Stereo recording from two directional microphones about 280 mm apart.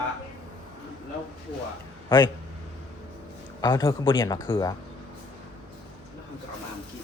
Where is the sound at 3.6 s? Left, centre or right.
Centre.